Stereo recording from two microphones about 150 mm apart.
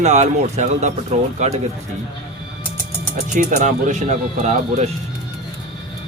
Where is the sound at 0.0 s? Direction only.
50° right (ahead or behind).